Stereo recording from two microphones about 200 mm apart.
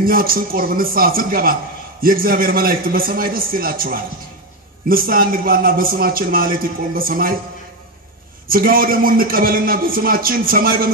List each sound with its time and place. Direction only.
0.0 s a man's voice: 45° right (ahead or behind)
8.5 s a man's voice: 45° right (ahead or behind)